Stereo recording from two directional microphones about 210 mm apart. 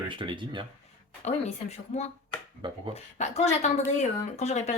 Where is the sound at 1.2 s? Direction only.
30° left (ahead or behind).